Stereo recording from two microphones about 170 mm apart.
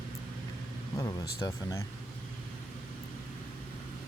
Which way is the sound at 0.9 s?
20° left (ahead or behind).